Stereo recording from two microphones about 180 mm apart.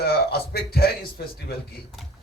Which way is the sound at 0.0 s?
60° left (ahead or behind).